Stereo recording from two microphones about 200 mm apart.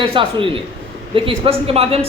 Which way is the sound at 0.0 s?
25° right (ahead or behind).